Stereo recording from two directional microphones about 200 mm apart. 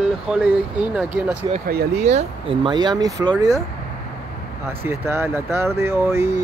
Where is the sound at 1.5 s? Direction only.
40° right (ahead or behind).